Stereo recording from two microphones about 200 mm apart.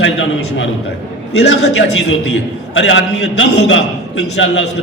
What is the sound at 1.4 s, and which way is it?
Speech, 55° left (ahead or behind).